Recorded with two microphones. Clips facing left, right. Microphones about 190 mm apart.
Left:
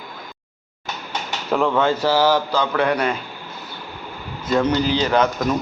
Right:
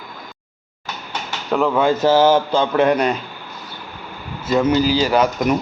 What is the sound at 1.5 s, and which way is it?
Speech, centre (ahead or behind).